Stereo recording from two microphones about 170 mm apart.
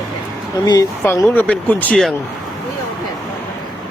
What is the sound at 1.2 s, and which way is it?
Speech, 10° left (ahead or behind).